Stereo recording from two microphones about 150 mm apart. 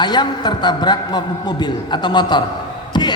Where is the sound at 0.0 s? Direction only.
30° left (ahead or behind).